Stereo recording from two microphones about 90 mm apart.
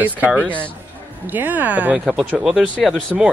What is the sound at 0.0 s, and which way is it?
Speech, 15° right (ahead or behind).